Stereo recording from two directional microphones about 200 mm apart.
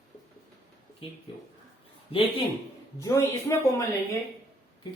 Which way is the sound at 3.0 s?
15° left (ahead or behind).